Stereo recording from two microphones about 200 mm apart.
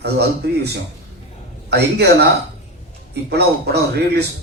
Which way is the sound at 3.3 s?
55° right (ahead or behind).